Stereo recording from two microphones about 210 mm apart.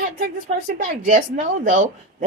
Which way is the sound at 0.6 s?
40° right (ahead or behind).